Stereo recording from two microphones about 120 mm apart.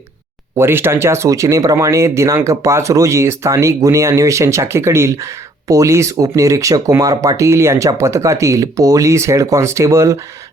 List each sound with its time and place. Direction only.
0.5 s speech: 20° right (ahead or behind)